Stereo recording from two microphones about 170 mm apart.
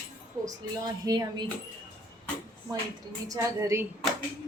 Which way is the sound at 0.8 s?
20° right (ahead or behind).